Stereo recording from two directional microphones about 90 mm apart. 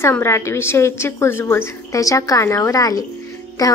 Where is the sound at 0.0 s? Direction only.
30° left (ahead or behind).